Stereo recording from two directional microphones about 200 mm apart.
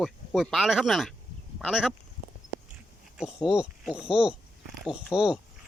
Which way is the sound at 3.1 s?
5° right (ahead or behind).